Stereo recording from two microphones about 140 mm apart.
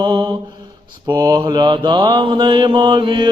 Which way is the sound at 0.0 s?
30° right (ahead or behind).